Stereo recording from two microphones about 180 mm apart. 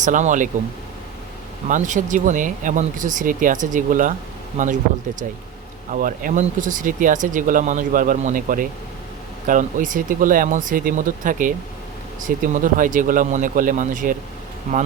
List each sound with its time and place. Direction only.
0.0 s speech: 45° right (ahead or behind)
1.6 s speech: 45° right (ahead or behind)
5.9 s speech: 50° right (ahead or behind)